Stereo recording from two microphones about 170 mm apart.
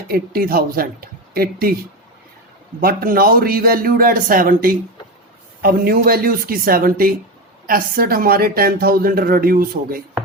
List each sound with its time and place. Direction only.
0.1 s speech: 60° right (ahead or behind)
2.8 s speech: 60° right (ahead or behind)